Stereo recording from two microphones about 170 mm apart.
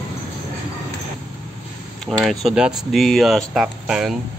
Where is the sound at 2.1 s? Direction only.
Centre (ahead or behind).